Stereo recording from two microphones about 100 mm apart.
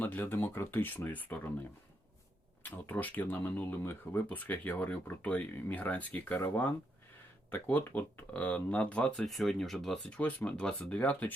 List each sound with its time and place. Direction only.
0.0 s speech: 20° left (ahead or behind)
2.6 s speech: 20° left (ahead or behind)